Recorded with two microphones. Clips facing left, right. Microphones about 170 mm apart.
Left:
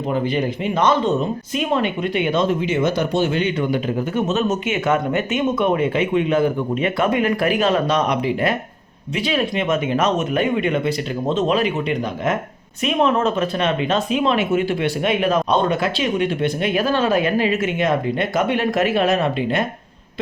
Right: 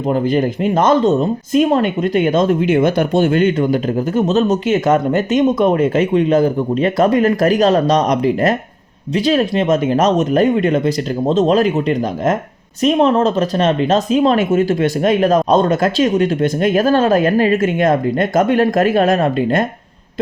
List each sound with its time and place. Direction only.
0.0 s speech: 45° right (ahead or behind)